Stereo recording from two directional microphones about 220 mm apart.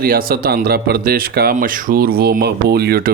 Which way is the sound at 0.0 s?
40° right (ahead or behind).